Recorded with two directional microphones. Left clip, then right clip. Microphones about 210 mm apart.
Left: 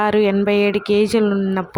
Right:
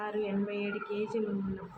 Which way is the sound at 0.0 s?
55° left (ahead or behind).